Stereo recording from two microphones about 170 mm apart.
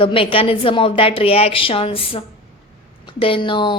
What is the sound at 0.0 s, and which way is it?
Speech, 30° left (ahead or behind).